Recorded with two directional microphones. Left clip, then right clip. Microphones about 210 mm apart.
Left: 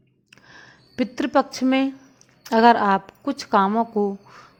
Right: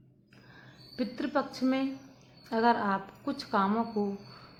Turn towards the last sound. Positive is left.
turn(degrees=40)  # may be behind; listen again after turning